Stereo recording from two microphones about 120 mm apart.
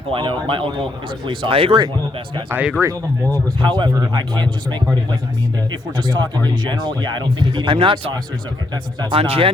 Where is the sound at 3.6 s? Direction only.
35° right (ahead or behind).